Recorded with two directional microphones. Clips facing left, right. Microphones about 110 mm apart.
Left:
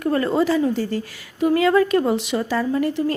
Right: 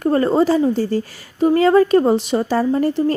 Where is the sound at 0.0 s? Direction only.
35° right (ahead or behind).